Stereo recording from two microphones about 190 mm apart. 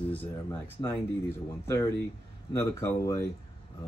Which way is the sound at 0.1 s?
10° left (ahead or behind).